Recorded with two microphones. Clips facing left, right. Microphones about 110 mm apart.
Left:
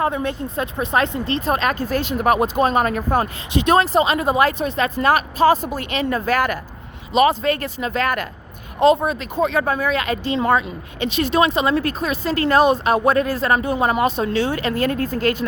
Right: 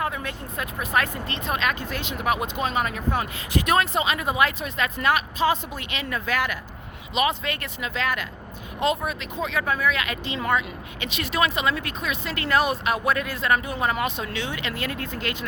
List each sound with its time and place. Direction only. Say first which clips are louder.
0.0 s speech: left 8 dB; 30° left (ahead or behind)
3.5 s speech: left 6 dB; 25° left (ahead or behind); by 8.3 s 50° left (ahead or behind)
8.8 s speech: left 9 dB; 30° left (ahead or behind)